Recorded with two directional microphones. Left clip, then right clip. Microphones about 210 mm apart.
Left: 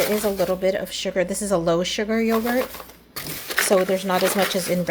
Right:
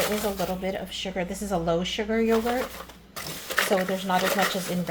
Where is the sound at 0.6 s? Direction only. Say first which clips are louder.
Left 8 dB; 50° left (ahead or behind).